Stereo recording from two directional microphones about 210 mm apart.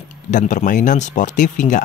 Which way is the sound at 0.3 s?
35° left (ahead or behind).